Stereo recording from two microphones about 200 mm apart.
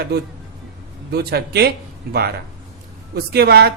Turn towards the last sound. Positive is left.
turn(degrees=-50)  # may be behind; listen again after turning